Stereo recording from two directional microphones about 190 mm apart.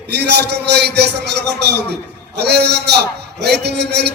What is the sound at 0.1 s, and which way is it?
A man's voice, 60° right (ahead or behind).